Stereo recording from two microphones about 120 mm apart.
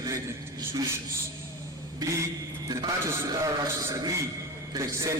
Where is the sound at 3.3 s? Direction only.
30° right (ahead or behind).